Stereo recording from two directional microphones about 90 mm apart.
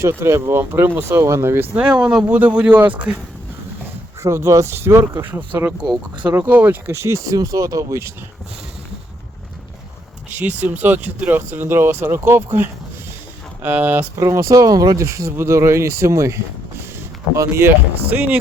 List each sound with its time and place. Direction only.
0.0 s speech: 30° right (ahead or behind)
4.2 s speech: 35° right (ahead or behind)
10.3 s speech: 20° right (ahead or behind)
13.6 s speech: 20° right (ahead or behind)